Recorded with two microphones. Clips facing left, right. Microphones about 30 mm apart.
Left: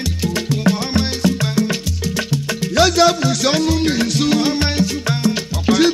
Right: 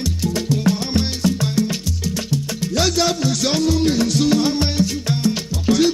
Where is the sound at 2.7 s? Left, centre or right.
Left.